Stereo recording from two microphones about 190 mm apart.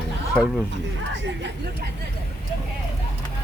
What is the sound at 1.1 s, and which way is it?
Speech, 70° right (ahead or behind).